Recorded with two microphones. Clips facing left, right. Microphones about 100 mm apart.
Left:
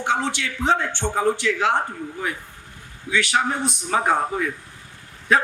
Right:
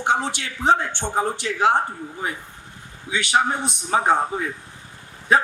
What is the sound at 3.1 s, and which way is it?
Speech, 25° right (ahead or behind).